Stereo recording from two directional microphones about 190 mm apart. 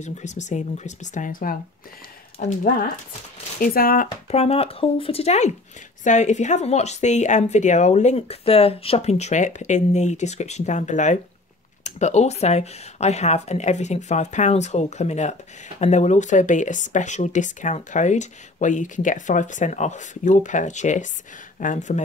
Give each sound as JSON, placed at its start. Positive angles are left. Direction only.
{"t": 0.0, "sound": "speech", "side_deg": 40}